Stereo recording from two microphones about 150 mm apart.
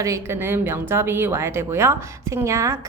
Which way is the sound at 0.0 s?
20° right (ahead or behind).